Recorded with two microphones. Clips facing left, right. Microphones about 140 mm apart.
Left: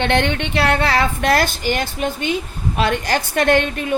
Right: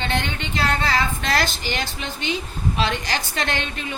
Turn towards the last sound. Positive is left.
turn(degrees=50)  # may be behind; listen again after turning